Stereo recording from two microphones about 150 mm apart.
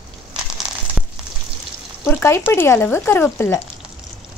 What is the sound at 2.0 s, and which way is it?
Speech, 15° left (ahead or behind).